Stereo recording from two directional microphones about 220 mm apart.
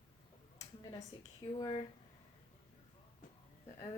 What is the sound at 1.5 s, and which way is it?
Speech, 25° left (ahead or behind).